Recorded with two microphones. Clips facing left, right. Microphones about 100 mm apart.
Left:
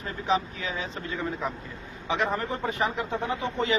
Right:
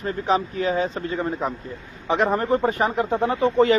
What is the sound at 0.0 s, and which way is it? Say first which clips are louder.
Speech: right 5 dB; 45° right (ahead or behind).